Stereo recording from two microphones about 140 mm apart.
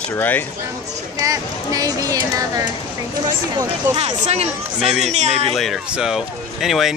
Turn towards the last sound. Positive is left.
turn(degrees=0)  # may be behind; listen again after turning